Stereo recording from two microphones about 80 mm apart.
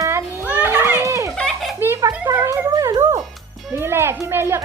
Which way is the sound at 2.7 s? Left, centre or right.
Right.